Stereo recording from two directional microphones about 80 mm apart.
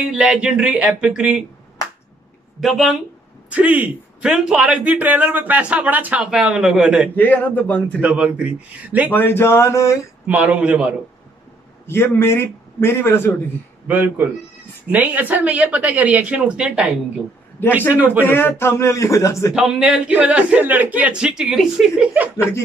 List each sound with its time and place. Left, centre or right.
0.1 s speech: centre
2.6 s speech: centre
3.4 s a man's voice: centre
7.2 s a man's voice: left
8.0 s speech: centre
9.1 s a man's voice: left
10.2 s speech: centre
11.8 s a man's voice: left
13.8 s a man's voice: right
18.2 s a man's voice: left
19.5 s speech: centre
22.1 s a man's voice: right